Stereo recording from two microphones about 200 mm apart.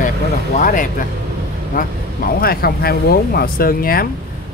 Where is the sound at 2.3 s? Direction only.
50° left (ahead or behind).